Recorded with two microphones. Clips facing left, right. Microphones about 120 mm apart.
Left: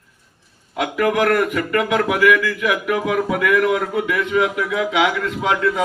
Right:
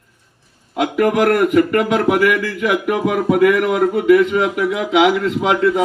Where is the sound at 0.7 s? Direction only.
35° right (ahead or behind).